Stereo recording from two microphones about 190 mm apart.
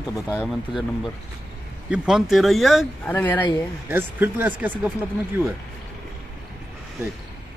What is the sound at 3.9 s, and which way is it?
Speech, 10° right (ahead or behind).